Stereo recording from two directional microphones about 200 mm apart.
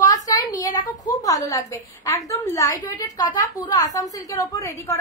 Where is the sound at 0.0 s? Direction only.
15° left (ahead or behind).